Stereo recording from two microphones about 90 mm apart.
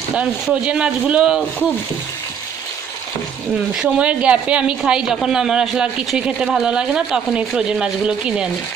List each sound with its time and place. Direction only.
0.1 s speech: 10° right (ahead or behind)
3.7 s speech: 10° right (ahead or behind)